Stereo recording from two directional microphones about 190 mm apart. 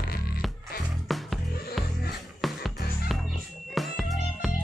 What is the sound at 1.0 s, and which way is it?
Music, centre (ahead or behind).